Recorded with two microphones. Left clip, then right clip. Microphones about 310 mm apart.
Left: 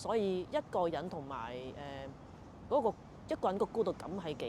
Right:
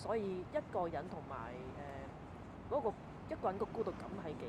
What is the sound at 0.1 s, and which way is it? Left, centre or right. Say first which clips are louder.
Speech: left 5 dB; left.